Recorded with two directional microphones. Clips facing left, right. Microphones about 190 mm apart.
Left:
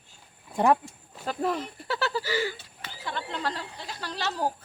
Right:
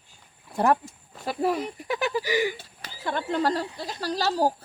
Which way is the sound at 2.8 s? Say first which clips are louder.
Right 5 dB; 45° right (ahead or behind).